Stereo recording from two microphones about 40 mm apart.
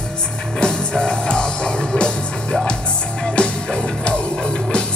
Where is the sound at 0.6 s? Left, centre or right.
Left.